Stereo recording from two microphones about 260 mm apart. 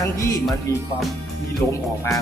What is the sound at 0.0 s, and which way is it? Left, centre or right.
Speech, centre.